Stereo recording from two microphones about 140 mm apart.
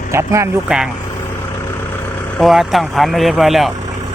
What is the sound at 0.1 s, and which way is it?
Speech, 20° right (ahead or behind).